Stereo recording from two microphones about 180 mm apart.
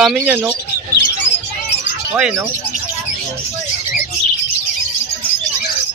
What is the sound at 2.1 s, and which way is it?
Speech, 10° right (ahead or behind).